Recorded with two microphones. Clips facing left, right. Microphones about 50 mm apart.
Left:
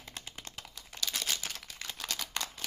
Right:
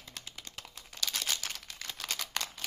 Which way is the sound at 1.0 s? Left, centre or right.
Centre.